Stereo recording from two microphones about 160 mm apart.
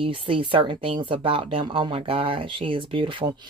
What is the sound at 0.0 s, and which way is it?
Speech, 30° right (ahead or behind).